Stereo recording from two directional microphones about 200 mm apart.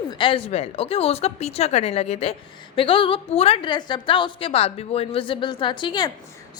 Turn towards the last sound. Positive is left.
turn(degrees=20)  # may be behind; listen again after turning